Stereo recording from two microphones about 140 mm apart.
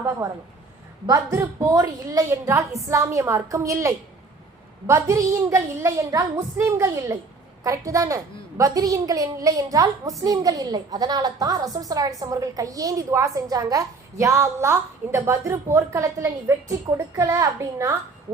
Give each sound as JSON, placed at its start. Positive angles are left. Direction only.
{"t": 1.0, "sound": "a woman's voice", "side_deg": -25}